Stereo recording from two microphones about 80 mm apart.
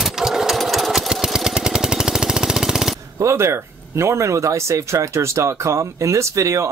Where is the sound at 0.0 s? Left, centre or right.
Centre.